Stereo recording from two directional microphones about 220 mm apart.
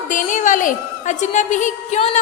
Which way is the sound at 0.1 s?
35° left (ahead or behind).